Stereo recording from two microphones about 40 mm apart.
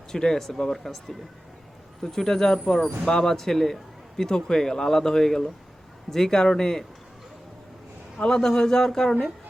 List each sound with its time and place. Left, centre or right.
0.1 s speech: centre
8.2 s speech: centre